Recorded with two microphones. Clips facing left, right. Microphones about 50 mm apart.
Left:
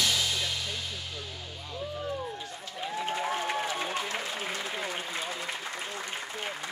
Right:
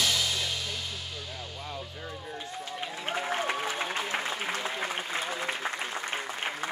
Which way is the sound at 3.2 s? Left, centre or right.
Centre.